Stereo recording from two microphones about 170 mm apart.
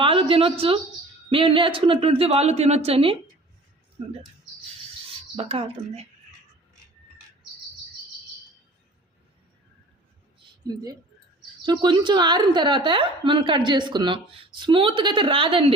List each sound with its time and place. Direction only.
0.0 s a sound: 30° right (ahead or behind)
1.3 s speech: 30° right (ahead or behind)
5.4 s speech: 35° right (ahead or behind)
10.6 s a woman's voice: 20° right (ahead or behind)